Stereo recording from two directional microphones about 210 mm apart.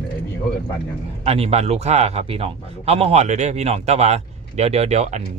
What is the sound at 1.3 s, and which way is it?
Speech, 30° right (ahead or behind).